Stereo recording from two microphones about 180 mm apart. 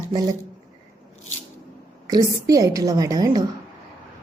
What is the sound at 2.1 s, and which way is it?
A woman's voice, 20° right (ahead or behind).